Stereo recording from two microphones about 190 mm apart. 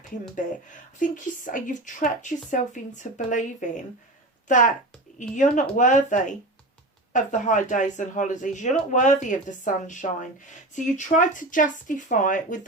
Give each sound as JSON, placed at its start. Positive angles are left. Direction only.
{"t": 0.9, "sound": "speech", "side_deg": 40}